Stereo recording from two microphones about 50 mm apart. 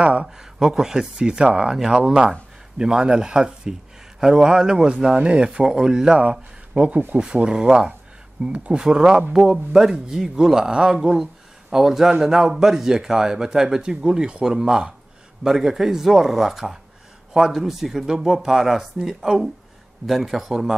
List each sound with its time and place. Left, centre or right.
0.0 s speech: right
0.4 s a man's voice: centre